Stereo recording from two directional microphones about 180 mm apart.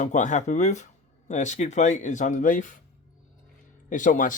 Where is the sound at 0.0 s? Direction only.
40° left (ahead or behind).